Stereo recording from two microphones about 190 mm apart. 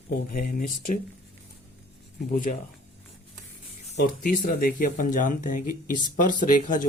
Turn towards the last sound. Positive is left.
turn(degrees=45)  # may be behind; listen again after turning